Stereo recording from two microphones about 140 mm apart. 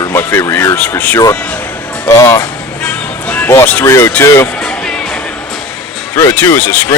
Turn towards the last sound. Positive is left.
turn(degrees=15)  # may be behind; listen again after turning